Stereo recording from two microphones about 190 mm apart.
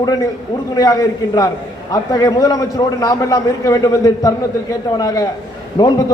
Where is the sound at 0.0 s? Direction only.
20° left (ahead or behind).